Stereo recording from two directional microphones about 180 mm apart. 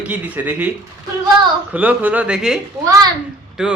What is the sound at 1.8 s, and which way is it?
A woman's voice, 10° right (ahead or behind).